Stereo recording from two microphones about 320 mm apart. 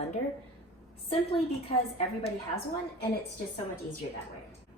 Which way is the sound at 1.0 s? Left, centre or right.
Centre.